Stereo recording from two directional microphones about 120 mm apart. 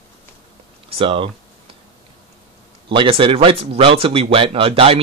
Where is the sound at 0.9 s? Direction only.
50° right (ahead or behind).